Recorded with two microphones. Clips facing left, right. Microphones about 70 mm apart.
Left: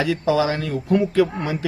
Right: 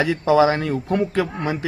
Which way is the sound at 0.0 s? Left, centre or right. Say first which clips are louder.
Right 3 dB; right.